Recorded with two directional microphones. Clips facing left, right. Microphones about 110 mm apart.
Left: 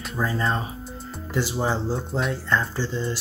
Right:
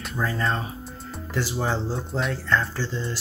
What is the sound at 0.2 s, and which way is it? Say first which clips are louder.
Speech: left 1 dB; 25° left (ahead or behind).